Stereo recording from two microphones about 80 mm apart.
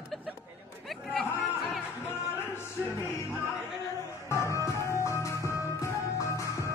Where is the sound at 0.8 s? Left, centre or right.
Centre.